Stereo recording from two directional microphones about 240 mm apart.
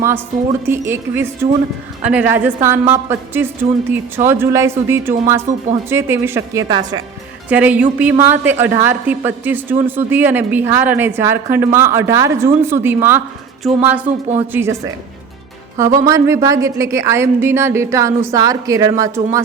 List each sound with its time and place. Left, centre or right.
0.7 s a woman's voice: centre
14.0 s speech: right
14.5 s a woman's voice: centre
15.8 s a woman's voice: centre